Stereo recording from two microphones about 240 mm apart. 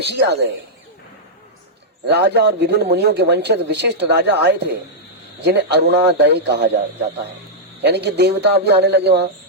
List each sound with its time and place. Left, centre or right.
0.0 s speech: right
2.0 s speech: right
7.8 s speech: right